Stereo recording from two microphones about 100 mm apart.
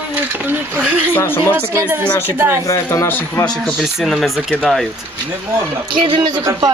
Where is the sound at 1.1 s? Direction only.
20° left (ahead or behind).